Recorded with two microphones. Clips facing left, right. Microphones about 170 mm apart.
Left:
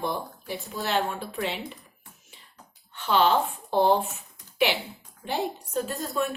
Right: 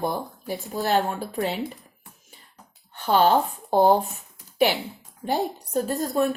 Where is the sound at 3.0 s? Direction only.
45° right (ahead or behind).